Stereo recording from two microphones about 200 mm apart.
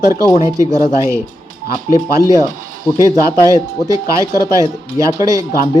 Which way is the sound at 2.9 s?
15° right (ahead or behind).